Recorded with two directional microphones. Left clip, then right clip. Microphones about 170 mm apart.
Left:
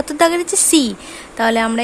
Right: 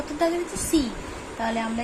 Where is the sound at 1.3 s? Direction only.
70° left (ahead or behind).